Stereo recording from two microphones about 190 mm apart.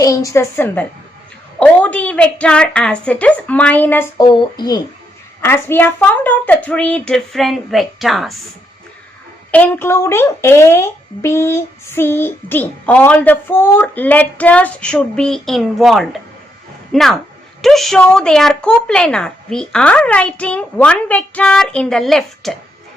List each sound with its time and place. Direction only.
0.0 s speech: 15° left (ahead or behind)
4.3 s speech: 25° left (ahead or behind)
5.4 s a woman's voice: 10° left (ahead or behind)
9.5 s a woman's voice: 10° left (ahead or behind)